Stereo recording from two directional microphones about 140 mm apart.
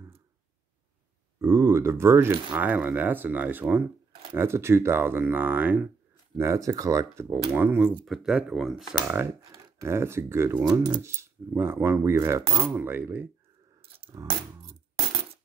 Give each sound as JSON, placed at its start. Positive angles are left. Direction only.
{"t": 1.4, "sound": "speech", "side_deg": -20}
{"t": 9.0, "sound": "speech", "side_deg": -15}
{"t": 10.6, "sound": "speech", "side_deg": -30}
{"t": 11.1, "sound": "speech", "side_deg": -20}